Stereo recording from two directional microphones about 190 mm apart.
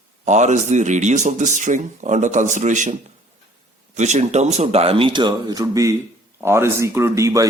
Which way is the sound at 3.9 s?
35° right (ahead or behind).